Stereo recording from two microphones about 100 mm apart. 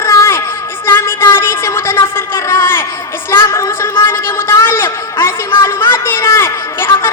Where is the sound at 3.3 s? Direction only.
25° left (ahead or behind).